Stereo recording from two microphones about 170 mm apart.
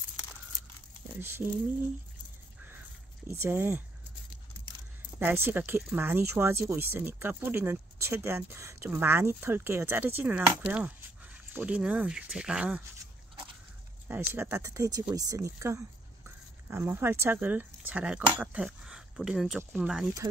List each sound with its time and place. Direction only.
1.2 s speech: 15° right (ahead or behind)
3.3 s speech: 15° right (ahead or behind)
5.2 s speech: 10° right (ahead or behind)
14.0 s speech: 10° right (ahead or behind)